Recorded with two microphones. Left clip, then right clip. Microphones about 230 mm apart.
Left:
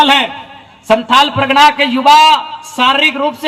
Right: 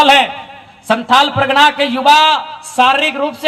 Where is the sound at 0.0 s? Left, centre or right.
Right.